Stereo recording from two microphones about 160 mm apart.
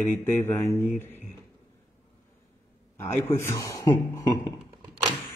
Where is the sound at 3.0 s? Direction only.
15° left (ahead or behind).